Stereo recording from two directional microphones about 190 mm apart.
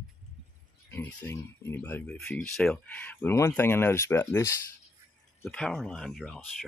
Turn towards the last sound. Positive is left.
turn(degrees=0)  # may be behind; listen again after turning